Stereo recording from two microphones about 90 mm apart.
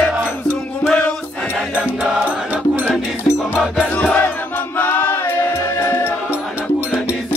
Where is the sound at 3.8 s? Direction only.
15° left (ahead or behind).